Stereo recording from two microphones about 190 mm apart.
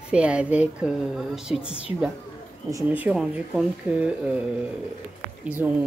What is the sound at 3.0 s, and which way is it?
Speech, 5° right (ahead or behind).